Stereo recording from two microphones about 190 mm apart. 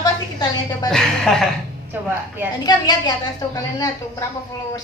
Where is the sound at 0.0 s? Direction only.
20° left (ahead or behind).